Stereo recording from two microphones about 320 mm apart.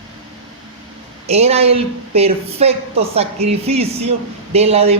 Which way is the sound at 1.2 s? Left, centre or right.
Centre.